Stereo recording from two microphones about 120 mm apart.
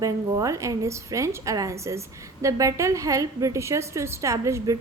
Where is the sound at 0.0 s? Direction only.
30° right (ahead or behind).